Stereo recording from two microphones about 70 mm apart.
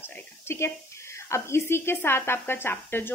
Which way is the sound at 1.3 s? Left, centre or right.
Left.